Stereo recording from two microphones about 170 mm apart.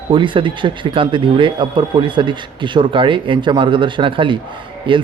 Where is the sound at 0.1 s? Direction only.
30° right (ahead or behind).